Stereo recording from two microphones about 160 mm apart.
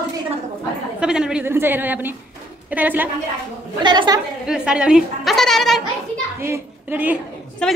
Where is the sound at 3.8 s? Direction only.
25° right (ahead or behind).